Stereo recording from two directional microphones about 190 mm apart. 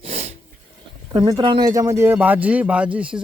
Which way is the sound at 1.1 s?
25° right (ahead or behind).